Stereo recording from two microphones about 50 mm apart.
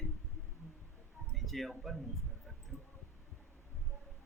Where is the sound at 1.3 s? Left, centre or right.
Centre.